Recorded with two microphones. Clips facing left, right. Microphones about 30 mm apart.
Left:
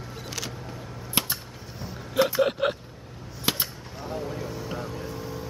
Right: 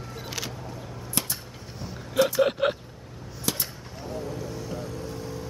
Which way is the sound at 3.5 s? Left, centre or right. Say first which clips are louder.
Left 3 dB; left.